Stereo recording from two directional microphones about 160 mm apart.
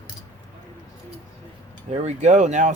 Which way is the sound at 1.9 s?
45° right (ahead or behind).